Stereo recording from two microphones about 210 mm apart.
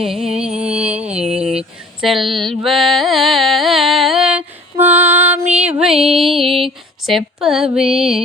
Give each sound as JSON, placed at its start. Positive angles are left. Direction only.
{"t": 0.0, "sound": "music", "side_deg": 0}
{"t": 1.3, "sound": "a sound", "side_deg": -30}
{"t": 1.5, "sound": "a sound", "side_deg": 0}
{"t": 2.6, "sound": "carnatic music", "side_deg": 0}
{"t": 5.6, "sound": "music", "side_deg": -5}
{"t": 5.9, "sound": "music", "side_deg": -25}
{"t": 7.0, "sound": "a woman's voice", "side_deg": 0}